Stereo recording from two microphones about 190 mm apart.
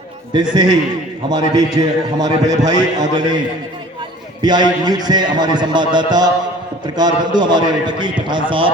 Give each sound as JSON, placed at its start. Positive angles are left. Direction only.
{"t": 0.5, "sound": "a man's voice", "side_deg": -20}
{"t": 4.4, "sound": "a man's voice", "side_deg": -20}